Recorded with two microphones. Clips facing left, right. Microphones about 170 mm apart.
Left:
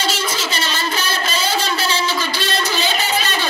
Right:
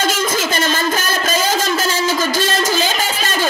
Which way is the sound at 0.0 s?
50° right (ahead or behind).